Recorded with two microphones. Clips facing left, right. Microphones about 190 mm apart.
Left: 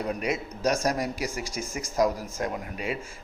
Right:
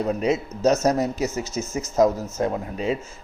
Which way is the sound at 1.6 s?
30° right (ahead or behind).